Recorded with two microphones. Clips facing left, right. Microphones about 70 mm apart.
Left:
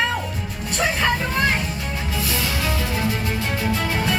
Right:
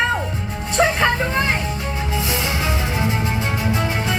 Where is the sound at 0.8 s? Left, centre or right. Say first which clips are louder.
Right 4 dB; right.